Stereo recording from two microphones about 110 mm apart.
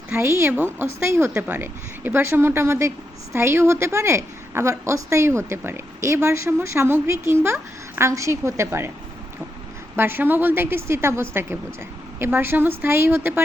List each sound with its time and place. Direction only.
0.1 s a woman's voice: 25° right (ahead or behind)
9.9 s a woman's voice: 20° right (ahead or behind)